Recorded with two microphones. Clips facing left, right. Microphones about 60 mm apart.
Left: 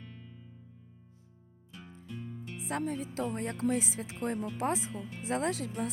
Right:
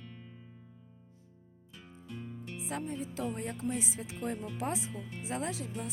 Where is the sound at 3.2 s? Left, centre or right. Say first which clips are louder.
Left 3 dB; left.